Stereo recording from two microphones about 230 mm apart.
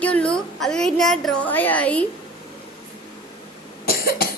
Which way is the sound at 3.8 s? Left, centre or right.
Left.